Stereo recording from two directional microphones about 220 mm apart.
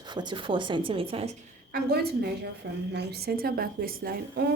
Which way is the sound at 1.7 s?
45° right (ahead or behind).